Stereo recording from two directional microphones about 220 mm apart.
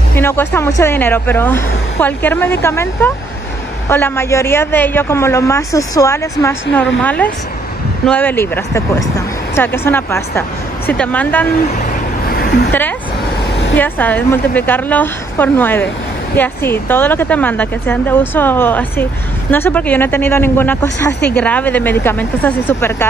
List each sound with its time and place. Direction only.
0.1 s speech: 10° left (ahead or behind)
12.3 s a sound: 45° left (ahead or behind)
13.7 s speech: 10° left (ahead or behind)